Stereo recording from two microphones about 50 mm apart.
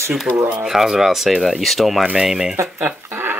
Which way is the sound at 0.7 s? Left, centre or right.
Centre.